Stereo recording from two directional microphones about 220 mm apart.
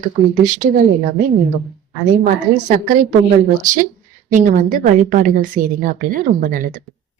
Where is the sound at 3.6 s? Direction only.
35° right (ahead or behind).